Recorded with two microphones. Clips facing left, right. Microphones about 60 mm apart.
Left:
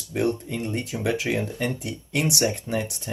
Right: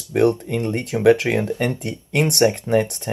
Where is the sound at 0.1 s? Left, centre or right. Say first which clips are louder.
Right 7 dB; right.